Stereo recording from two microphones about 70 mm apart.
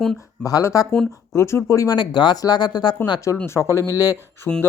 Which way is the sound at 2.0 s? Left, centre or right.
Left.